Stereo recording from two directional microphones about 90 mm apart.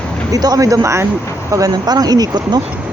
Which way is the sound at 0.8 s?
30° right (ahead or behind).